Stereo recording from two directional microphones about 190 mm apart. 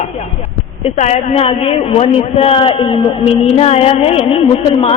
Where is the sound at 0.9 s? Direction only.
35° left (ahead or behind).